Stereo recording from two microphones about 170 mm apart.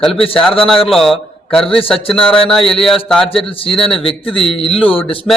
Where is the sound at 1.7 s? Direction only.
35° left (ahead or behind).